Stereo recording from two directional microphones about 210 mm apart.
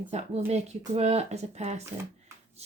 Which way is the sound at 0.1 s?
30° right (ahead or behind).